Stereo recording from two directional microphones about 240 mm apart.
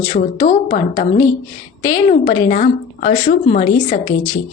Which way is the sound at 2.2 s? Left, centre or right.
Left.